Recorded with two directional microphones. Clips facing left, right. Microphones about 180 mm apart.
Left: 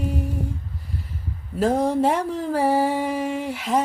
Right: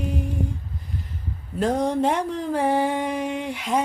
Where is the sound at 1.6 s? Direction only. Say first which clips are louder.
Left 2 dB; 5° left (ahead or behind).